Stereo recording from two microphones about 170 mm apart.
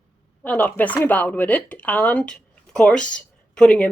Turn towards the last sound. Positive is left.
turn(degrees=5)  # may be behind; listen again after turning